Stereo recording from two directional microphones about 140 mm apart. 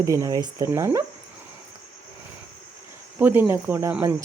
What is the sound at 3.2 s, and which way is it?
Speech, 15° right (ahead or behind).